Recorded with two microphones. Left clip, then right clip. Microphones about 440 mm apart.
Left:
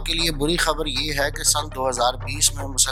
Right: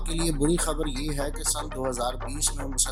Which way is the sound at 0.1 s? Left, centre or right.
Centre.